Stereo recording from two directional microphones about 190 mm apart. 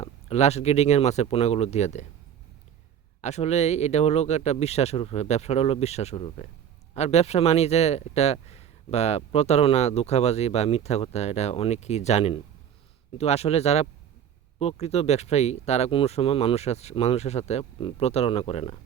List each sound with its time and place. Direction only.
0.0 s speech: 35° left (ahead or behind)
3.2 s speech: 35° left (ahead or behind)